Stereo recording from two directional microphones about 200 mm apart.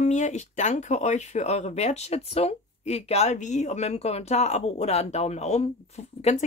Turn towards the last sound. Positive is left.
turn(degrees=35)  # may be behind; listen again after turning